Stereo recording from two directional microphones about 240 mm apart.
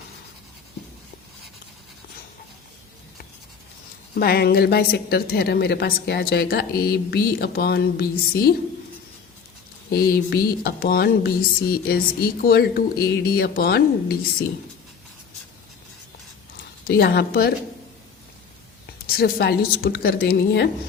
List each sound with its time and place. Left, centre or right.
4.1 s speech: left
9.9 s speech: left
16.8 s speech: left
19.1 s speech: left